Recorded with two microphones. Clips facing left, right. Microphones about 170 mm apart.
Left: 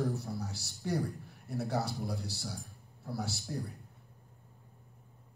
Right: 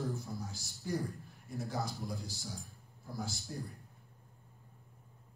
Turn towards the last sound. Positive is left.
turn(degrees=70)  # may be behind; listen again after turning